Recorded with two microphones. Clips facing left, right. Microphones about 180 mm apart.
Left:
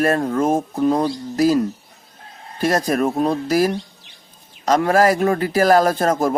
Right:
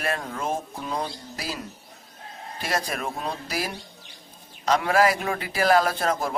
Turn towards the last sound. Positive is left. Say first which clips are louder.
# left 8 dB
turn(degrees=45)  # may be behind; listen again after turning